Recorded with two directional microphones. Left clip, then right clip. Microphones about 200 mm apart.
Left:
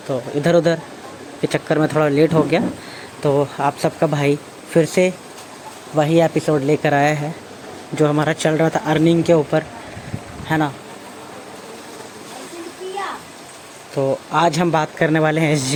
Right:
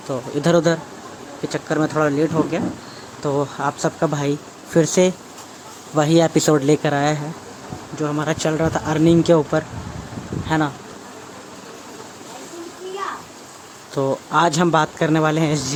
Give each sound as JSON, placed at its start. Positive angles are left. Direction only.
{"t": 0.1, "sound": "speech", "side_deg": 0}
{"t": 3.2, "sound": "speech", "side_deg": 0}
{"t": 4.9, "sound": "speech", "side_deg": -10}
{"t": 6.7, "sound": "speech", "side_deg": -5}
{"t": 9.2, "sound": "speech", "side_deg": -15}
{"t": 13.9, "sound": "speech", "side_deg": -15}